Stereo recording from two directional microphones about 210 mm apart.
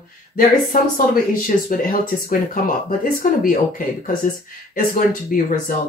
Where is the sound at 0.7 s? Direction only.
40° left (ahead or behind).